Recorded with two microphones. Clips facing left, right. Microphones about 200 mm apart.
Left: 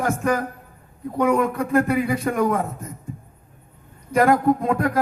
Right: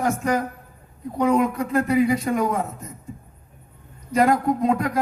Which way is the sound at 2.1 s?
55° left (ahead or behind).